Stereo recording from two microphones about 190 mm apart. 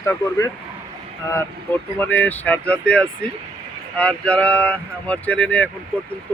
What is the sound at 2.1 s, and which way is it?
Speech, 10° left (ahead or behind).